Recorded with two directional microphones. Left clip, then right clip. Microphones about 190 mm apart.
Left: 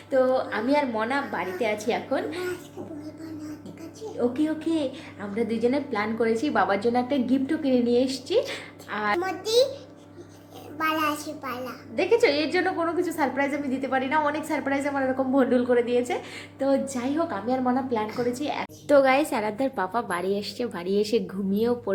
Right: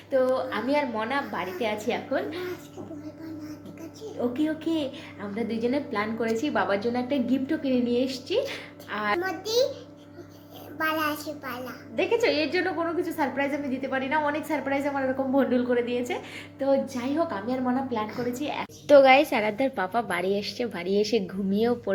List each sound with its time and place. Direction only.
0.1 s a child's voice: 15° left (ahead or behind)
4.2 s a child's voice: 10° left (ahead or behind)
10.8 s a child's voice: 10° left (ahead or behind)